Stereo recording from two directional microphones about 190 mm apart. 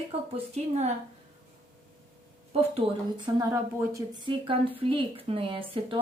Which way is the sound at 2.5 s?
30° right (ahead or behind).